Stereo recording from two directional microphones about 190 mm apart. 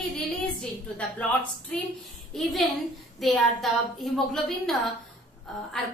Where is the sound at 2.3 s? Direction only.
Centre (ahead or behind).